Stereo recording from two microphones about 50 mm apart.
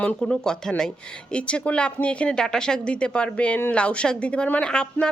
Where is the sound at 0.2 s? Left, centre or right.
Centre.